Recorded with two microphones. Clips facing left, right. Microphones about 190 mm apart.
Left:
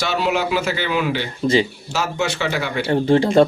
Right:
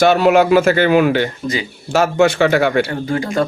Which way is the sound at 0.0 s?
50° right (ahead or behind).